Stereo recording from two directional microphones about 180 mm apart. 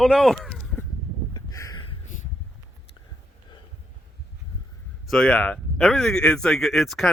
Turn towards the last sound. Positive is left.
turn(degrees=0)  # may be behind; listen again after turning